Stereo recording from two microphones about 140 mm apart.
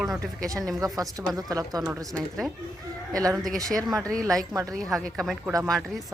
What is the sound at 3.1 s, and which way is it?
Speech, 25° right (ahead or behind).